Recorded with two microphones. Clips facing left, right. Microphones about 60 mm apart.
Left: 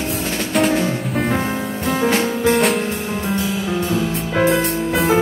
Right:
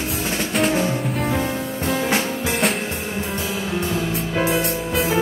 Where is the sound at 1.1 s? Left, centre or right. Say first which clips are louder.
Left 3 dB; left.